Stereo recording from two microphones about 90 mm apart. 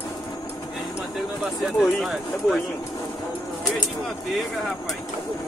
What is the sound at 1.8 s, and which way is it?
Speech, centre (ahead or behind).